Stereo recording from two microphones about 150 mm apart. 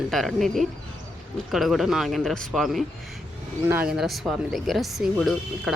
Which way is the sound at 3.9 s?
Centre (ahead or behind).